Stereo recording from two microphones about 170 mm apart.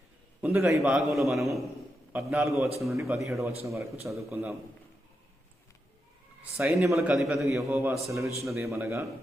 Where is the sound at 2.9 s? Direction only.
15° right (ahead or behind).